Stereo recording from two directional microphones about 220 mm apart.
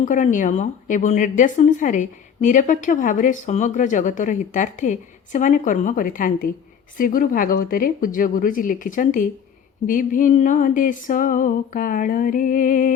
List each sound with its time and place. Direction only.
0.0 s a woman's voice: 35° left (ahead or behind)